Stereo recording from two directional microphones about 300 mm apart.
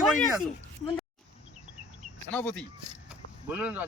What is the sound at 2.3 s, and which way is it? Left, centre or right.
Speech, centre.